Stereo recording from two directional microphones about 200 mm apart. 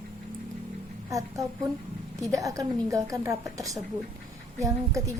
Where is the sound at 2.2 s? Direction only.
15° right (ahead or behind).